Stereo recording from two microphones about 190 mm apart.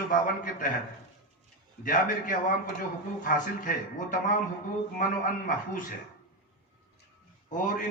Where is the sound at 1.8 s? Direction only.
45° left (ahead or behind).